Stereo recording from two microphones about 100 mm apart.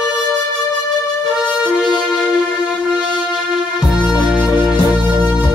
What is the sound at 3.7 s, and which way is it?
Music, 5° right (ahead or behind).